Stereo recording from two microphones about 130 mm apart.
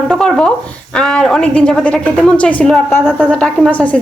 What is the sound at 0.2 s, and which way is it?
A woman's voice, 5° left (ahead or behind).